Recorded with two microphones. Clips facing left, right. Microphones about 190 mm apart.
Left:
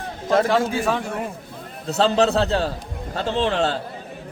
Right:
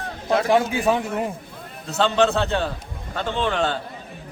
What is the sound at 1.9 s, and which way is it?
Speech, 35° left (ahead or behind).